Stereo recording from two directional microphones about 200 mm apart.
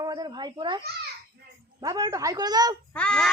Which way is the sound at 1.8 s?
15° right (ahead or behind).